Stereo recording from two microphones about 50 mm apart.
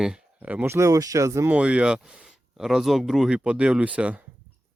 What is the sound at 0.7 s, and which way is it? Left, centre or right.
Speech, right.